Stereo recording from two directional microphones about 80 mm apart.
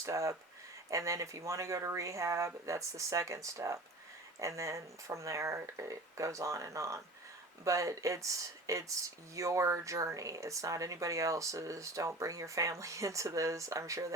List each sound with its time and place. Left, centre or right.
0.0 s speech: right